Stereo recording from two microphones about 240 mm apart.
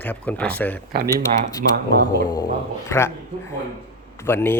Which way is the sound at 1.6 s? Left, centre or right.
Right.